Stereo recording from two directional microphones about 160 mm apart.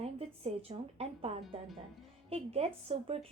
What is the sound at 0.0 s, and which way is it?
A woman's voice, 40° right (ahead or behind).